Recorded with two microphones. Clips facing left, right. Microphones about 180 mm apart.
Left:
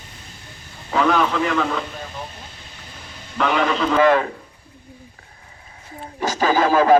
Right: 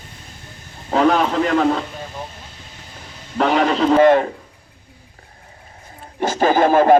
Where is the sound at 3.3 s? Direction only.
40° right (ahead or behind).